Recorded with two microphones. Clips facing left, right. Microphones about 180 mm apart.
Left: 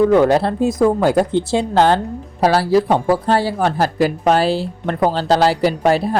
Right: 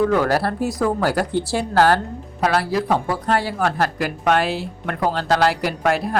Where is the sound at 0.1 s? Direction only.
20° left (ahead or behind).